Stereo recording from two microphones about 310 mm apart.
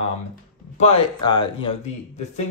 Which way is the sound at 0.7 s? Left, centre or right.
Centre.